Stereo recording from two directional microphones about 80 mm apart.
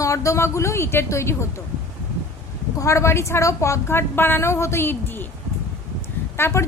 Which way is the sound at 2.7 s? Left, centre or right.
Left.